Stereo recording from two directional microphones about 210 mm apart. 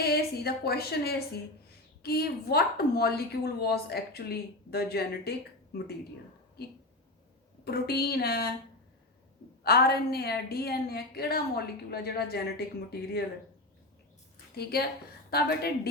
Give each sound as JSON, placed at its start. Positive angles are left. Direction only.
{"t": 0.0, "sound": "speech", "side_deg": 50}
{"t": 6.6, "sound": "speech", "side_deg": 50}
{"t": 9.6, "sound": "speech", "side_deg": 45}
{"t": 14.5, "sound": "speech", "side_deg": 50}